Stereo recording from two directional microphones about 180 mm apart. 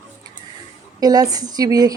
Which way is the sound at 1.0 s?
20° right (ahead or behind).